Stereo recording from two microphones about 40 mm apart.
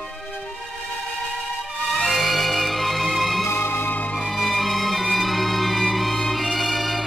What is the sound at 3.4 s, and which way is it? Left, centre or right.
Music, left.